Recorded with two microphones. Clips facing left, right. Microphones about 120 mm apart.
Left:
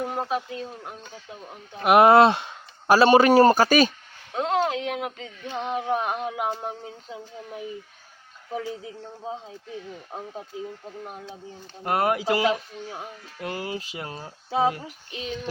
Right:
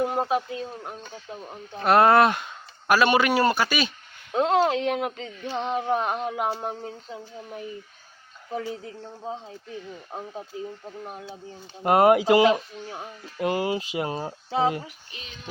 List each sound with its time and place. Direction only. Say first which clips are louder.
0.0 s speech: right 3 dB; 5° right (ahead or behind)
1.8 s a man's voice: left 2 dB; 15° left (ahead or behind); by 3.9 s 40° left (ahead or behind)
4.4 s speech: right 3 dB; centre (ahead or behind)
10.1 s speech: right 1 dB; 5° right (ahead or behind)
11.8 s speech: right 6 dB; 20° right (ahead or behind)
15.1 s speech: left 13 dB; 90° left